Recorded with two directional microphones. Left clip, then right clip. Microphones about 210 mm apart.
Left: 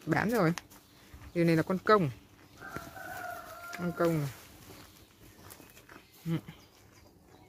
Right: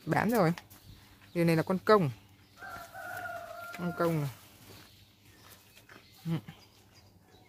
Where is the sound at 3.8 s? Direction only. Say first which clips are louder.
Left 1 dB; 25° right (ahead or behind).